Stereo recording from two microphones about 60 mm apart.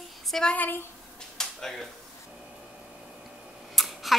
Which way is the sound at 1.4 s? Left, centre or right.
Centre.